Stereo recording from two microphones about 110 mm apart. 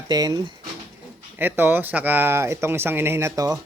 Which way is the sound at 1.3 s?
20° right (ahead or behind).